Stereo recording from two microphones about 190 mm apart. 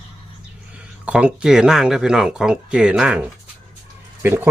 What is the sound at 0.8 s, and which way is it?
Speech, 5° right (ahead or behind).